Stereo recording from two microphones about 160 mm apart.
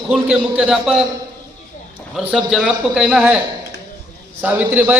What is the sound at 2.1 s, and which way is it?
A man's voice, 5° right (ahead or behind).